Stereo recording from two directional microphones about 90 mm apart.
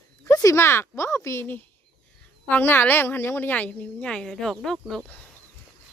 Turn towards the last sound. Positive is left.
turn(degrees=5)  # may be behind; listen again after turning